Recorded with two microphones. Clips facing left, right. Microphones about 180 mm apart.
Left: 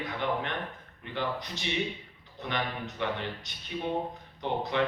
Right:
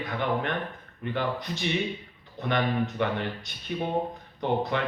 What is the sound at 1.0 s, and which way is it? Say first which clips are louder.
Speech: right 4 dB; 50° right (ahead or behind).